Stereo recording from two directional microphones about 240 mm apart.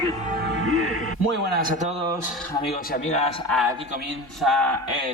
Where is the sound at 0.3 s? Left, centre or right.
Right.